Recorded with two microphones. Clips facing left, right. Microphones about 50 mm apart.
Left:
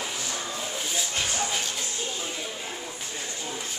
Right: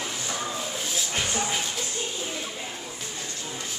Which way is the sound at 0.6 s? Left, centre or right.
Centre.